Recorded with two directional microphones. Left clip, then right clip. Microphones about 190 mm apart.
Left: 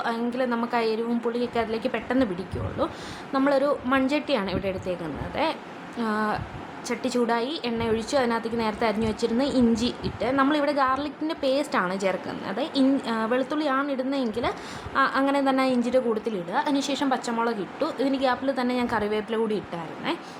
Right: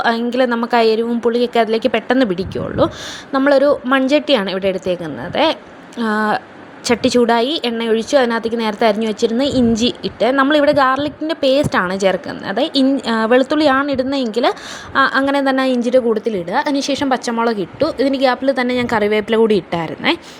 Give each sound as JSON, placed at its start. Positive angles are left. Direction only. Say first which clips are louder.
{"t": 0.0, "sound": "a woman's voice", "louder": "right 11 dB", "side_deg": -35}